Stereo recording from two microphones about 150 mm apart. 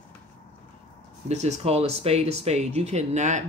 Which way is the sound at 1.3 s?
50° right (ahead or behind).